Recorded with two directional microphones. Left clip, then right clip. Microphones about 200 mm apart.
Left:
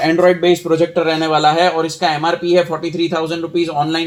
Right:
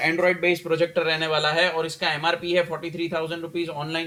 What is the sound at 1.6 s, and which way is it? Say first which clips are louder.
Speech: left 8 dB; 15° left (ahead or behind).